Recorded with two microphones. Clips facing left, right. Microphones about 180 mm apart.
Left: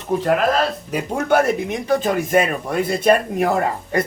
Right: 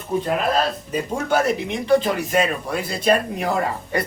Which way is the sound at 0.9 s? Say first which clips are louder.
Left 3 dB; 65° left (ahead or behind).